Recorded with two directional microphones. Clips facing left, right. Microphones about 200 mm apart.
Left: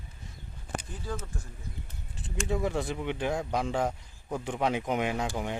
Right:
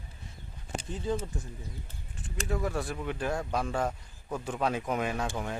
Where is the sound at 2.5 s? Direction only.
20° left (ahead or behind).